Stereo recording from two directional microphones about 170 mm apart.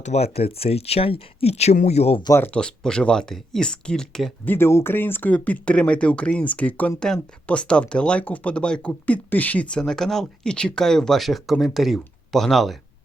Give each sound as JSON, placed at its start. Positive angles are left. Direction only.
{"t": 0.0, "sound": "speech", "side_deg": 40}
{"t": 2.2, "sound": "speech", "side_deg": 15}
{"t": 4.5, "sound": "speech", "side_deg": 15}